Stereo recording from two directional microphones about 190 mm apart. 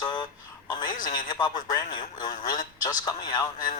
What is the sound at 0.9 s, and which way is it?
Speech, 45° left (ahead or behind).